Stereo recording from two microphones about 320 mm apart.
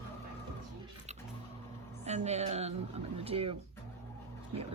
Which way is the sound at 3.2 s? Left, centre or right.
Centre.